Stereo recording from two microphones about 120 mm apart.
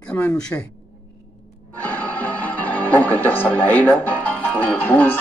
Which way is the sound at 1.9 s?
15° left (ahead or behind).